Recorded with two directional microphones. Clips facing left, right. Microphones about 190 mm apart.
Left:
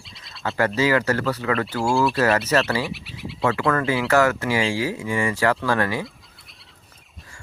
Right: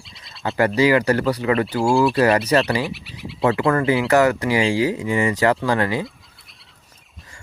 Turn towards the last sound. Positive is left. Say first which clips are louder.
# right 2 dB
turn(degrees=-20)  # may be behind; listen again after turning